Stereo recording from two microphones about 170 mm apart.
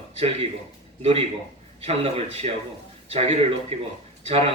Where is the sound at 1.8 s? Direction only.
35° right (ahead or behind).